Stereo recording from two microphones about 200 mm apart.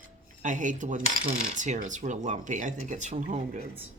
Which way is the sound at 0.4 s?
40° right (ahead or behind).